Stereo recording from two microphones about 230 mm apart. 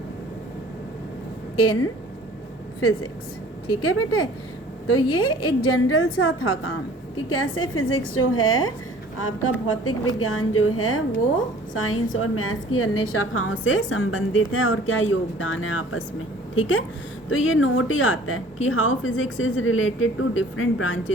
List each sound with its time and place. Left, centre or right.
1.5 s speech: left
3.8 s speech: left